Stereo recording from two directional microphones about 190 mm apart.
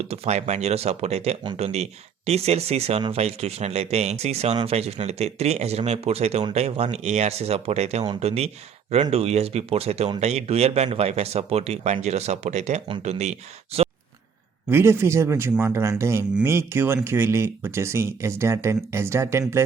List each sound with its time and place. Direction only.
0.1 s speech: 35° right (ahead or behind)
13.7 s a sound: 30° right (ahead or behind)
14.7 s speech: 15° right (ahead or behind)